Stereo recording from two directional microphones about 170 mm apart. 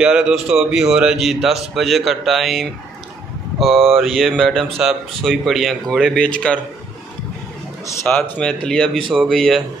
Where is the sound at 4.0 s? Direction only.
Centre (ahead or behind).